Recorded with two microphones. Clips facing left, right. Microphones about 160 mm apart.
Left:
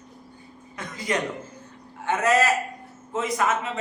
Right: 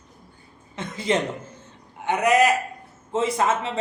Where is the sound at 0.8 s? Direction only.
25° right (ahead or behind).